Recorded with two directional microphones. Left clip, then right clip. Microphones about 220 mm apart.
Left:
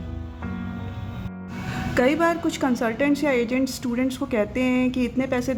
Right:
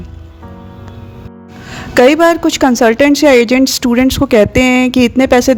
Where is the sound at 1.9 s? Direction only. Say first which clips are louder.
Right 13 dB; 45° right (ahead or behind).